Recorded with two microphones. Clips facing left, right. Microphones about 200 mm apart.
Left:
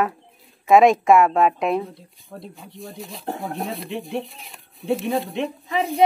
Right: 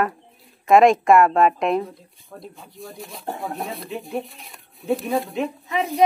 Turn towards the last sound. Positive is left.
turn(degrees=30)  # may be behind; listen again after turning